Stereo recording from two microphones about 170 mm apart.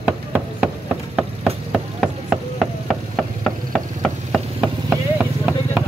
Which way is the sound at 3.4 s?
5° left (ahead or behind).